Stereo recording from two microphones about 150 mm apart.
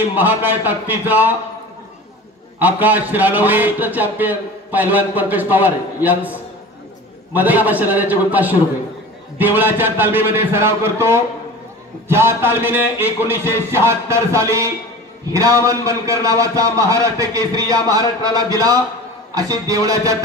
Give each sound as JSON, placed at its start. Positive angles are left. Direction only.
{"t": 0.1, "sound": "a man's voice", "side_deg": -15}
{"t": 2.6, "sound": "a man's voice", "side_deg": -10}
{"t": 7.3, "sound": "a man's voice", "side_deg": -10}